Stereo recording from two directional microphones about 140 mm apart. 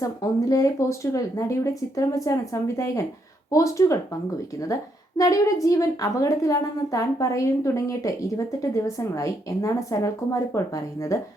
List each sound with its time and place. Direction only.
0.0 s a woman's voice: 25° left (ahead or behind)